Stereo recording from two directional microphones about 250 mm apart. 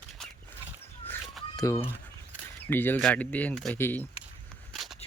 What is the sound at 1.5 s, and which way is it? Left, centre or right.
Speech, centre.